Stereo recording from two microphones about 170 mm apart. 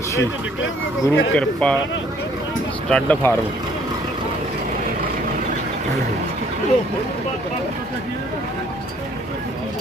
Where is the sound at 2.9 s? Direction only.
5° left (ahead or behind).